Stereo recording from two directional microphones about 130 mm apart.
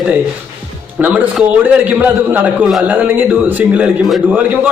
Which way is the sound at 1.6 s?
15° right (ahead or behind).